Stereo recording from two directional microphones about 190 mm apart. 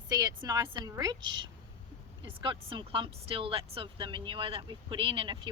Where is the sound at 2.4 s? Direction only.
25° right (ahead or behind).